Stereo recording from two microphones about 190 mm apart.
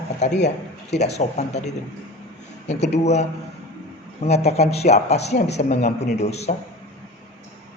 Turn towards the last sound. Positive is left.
turn(degrees=35)  # may be behind; listen again after turning